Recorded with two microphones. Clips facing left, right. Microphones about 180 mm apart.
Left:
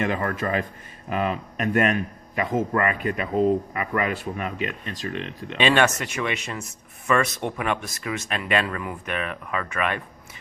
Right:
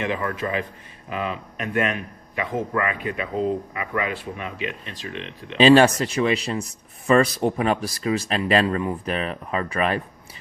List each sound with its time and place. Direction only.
0.0 s a man's voice: 45° left (ahead or behind)
5.5 s speech: 35° right (ahead or behind)